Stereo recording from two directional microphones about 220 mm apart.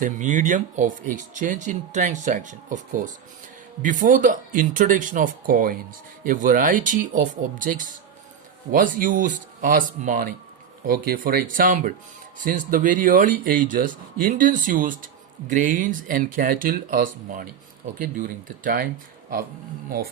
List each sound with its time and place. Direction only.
0.0 s speech: 35° right (ahead or behind)